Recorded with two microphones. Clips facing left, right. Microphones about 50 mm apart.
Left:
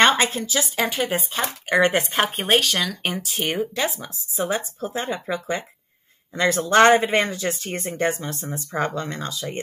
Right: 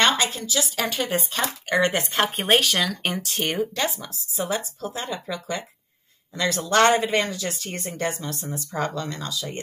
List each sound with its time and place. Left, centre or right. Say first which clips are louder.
0.0 s a woman's voice: left 4 dB; left
0.8 s speech: left 1 dB; centre
2.2 s speech: even; centre; by 9.6 s left